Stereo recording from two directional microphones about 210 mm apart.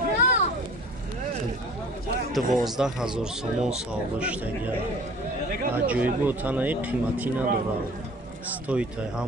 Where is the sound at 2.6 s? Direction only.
Centre (ahead or behind).